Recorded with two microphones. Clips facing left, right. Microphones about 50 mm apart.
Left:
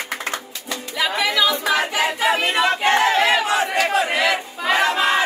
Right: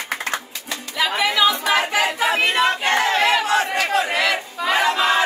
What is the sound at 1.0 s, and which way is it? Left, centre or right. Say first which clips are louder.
Music: right 1 dB; centre.